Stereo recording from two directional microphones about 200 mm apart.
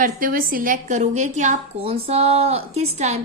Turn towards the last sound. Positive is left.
turn(degrees=-35)  # may be behind; listen again after turning